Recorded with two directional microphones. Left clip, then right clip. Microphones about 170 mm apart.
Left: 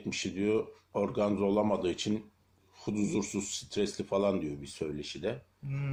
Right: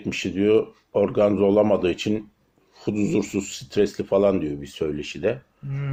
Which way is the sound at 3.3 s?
20° right (ahead or behind).